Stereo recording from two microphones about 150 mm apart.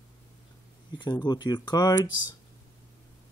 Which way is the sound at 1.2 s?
30° left (ahead or behind).